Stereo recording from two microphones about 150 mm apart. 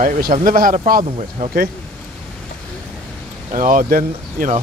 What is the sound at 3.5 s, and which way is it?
Speech, 60° right (ahead or behind).